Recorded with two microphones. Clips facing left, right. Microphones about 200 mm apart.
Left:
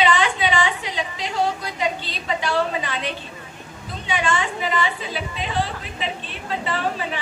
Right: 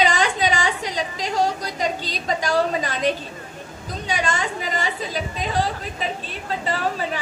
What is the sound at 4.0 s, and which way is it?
A woman's voice, 40° right (ahead or behind).